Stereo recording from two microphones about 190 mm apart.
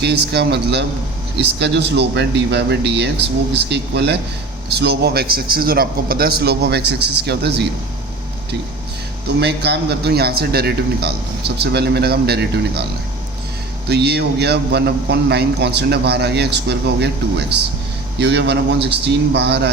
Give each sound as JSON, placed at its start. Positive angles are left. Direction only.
{"t": 0.0, "sound": "a man's voice", "side_deg": -60}
{"t": 9.4, "sound": "a man's voice", "side_deg": -60}
{"t": 13.8, "sound": "a man's voice", "side_deg": -60}